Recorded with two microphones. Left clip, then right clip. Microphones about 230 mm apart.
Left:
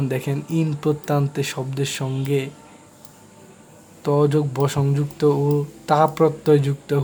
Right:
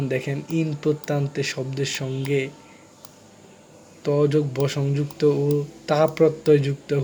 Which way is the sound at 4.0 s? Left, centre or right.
Centre.